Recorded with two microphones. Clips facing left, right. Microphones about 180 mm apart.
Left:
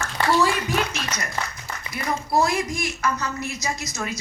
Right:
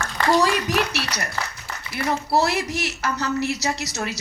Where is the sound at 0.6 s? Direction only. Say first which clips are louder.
Right 2 dB; 70° right (ahead or behind).